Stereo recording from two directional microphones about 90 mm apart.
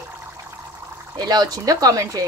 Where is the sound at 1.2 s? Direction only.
50° right (ahead or behind).